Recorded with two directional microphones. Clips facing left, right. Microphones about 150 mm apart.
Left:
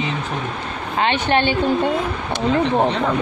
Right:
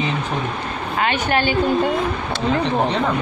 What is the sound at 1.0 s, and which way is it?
Speech, 25° left (ahead or behind).